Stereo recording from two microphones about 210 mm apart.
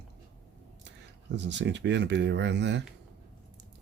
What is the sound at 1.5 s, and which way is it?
Speech, 55° right (ahead or behind).